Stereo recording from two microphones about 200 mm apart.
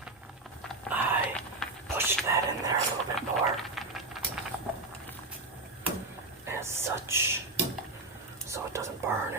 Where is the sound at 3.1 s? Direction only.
Centre (ahead or behind).